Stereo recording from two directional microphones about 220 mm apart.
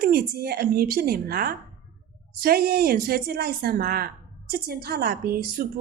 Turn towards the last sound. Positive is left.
turn(degrees=-45)  # may be behind; listen again after turning